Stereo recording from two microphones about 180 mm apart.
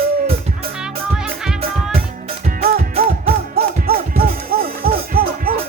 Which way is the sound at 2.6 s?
55° right (ahead or behind).